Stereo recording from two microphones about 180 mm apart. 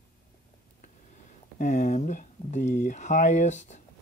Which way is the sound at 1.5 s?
40° left (ahead or behind).